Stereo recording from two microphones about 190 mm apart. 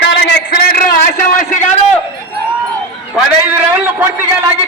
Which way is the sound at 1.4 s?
40° left (ahead or behind).